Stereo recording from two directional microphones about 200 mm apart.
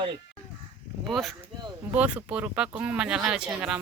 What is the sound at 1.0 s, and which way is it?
Speech, centre (ahead or behind).